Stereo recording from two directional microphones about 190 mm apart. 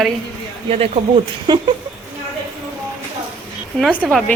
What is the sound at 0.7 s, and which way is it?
Speech, 30° right (ahead or behind).